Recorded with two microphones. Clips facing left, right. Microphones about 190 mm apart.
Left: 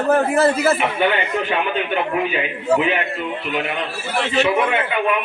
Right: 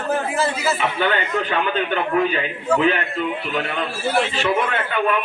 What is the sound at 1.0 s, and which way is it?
A man's voice, 15° left (ahead or behind).